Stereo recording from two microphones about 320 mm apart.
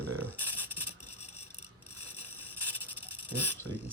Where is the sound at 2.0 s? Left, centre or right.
Left.